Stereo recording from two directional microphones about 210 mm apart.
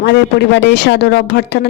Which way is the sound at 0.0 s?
55° left (ahead or behind).